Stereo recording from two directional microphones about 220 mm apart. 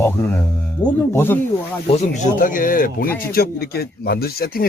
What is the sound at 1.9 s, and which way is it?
Speech, 30° left (ahead or behind).